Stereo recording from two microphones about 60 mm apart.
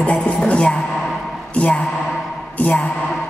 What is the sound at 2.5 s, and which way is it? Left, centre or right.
Music, left.